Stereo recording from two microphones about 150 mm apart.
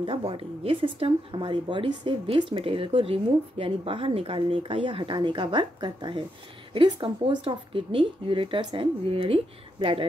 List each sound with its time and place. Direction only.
0.0 s speech: 35° right (ahead or behind)